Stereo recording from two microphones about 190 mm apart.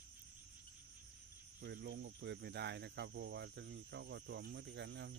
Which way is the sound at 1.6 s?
60° right (ahead or behind).